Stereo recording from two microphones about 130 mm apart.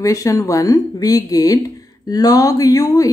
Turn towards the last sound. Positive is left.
turn(degrees=25)  # may be behind; listen again after turning